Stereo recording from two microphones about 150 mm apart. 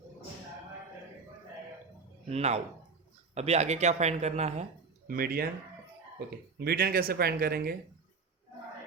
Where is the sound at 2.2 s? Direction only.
45° right (ahead or behind).